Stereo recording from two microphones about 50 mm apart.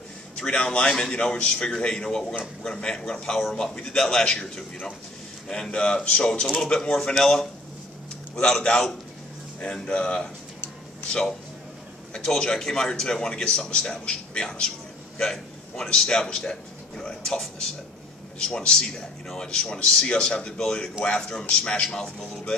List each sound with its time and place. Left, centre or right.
0.4 s a man's voice: centre
0.8 s a man's voice: centre
1.1 s a man's voice: left
6.4 s a man's voice: centre